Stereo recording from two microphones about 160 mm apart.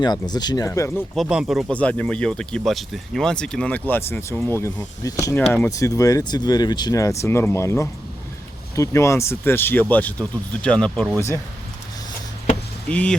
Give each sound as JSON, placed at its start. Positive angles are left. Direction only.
{"t": 0.0, "sound": "speech", "side_deg": 25}
{"t": 1.1, "sound": "speech", "side_deg": 0}
{"t": 1.8, "sound": "speech", "side_deg": 10}
{"t": 5.7, "sound": "speech", "side_deg": 20}
{"t": 12.9, "sound": "speech", "side_deg": 5}